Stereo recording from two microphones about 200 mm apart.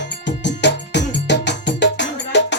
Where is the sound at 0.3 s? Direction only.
60° left (ahead or behind).